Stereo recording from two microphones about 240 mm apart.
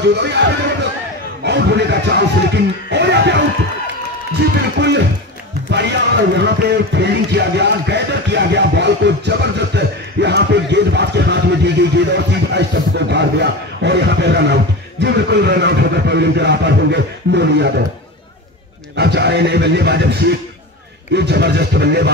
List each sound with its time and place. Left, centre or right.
0.0 s speech: right
4.7 s speech: right
18.9 s speech: right